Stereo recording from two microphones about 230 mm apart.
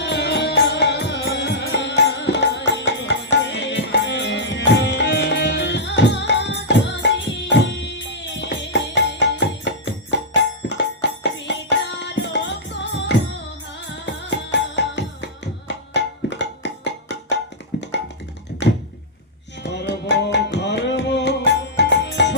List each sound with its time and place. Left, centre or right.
0.0 s music: left
19.6 s music: left